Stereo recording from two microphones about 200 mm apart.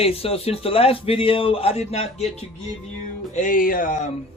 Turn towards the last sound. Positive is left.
turn(degrees=45)  # may be behind; listen again after turning